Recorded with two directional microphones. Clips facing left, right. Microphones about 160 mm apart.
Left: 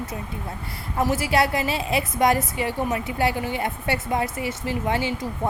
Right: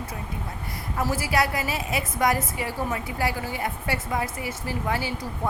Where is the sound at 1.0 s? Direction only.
25° left (ahead or behind).